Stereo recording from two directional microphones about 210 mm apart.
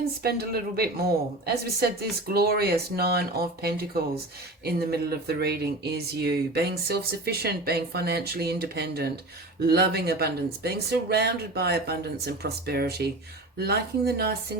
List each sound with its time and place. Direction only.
0.2 s speech: 45° right (ahead or behind)